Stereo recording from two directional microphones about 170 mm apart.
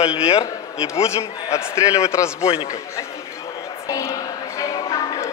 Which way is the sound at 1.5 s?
15° left (ahead or behind).